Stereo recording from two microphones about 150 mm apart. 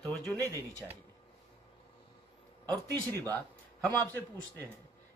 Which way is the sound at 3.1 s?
10° left (ahead or behind).